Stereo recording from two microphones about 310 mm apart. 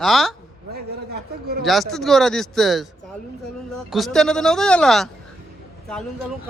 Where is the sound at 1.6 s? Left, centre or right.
Centre.